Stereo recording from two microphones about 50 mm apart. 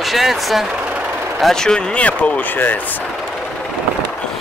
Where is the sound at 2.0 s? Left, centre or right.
Left.